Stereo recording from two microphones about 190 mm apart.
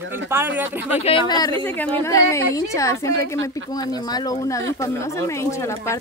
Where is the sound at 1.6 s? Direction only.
10° left (ahead or behind).